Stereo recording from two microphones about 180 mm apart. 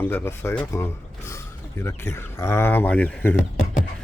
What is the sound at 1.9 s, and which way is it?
Speech, 15° left (ahead or behind).